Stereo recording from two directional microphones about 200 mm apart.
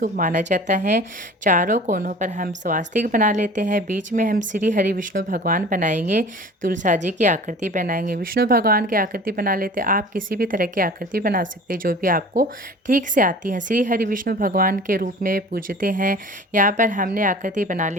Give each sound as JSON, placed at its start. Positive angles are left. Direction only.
{"t": 0.0, "sound": "a woman's voice", "side_deg": -40}